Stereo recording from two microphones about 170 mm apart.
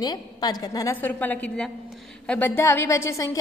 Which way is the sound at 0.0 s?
25° left (ahead or behind).